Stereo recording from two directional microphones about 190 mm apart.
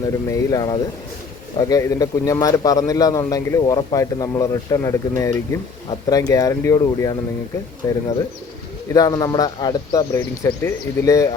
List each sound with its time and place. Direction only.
0.3 s a man's voice: 15° left (ahead or behind)